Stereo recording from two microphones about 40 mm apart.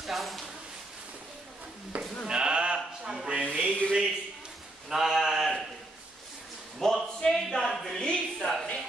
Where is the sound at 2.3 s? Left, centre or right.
Right.